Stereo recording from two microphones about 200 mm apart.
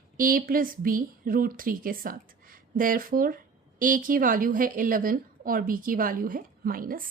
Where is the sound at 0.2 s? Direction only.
45° right (ahead or behind).